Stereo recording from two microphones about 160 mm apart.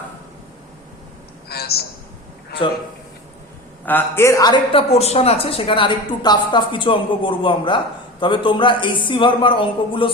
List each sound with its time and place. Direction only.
1.5 s a sound: 80° left
3.8 s a man's voice: 15° left (ahead or behind)
4.9 s a woman's voice: 40° left (ahead or behind)